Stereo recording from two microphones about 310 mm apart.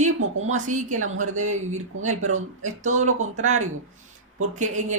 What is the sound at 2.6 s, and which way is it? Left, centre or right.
Speech, right.